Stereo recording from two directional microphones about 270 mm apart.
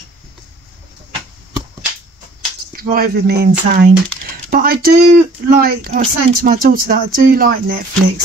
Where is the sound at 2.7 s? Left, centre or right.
Right.